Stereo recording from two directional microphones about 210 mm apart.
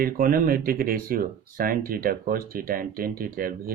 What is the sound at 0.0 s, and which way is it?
Speech, 45° right (ahead or behind).